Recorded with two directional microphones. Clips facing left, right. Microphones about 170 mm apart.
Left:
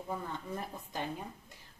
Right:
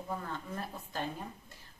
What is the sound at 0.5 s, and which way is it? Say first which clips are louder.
Speech: even; 15° left (ahead or behind).